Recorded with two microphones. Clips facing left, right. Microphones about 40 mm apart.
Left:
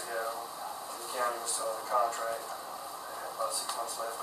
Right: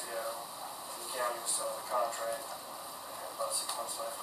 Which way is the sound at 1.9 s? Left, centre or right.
Centre.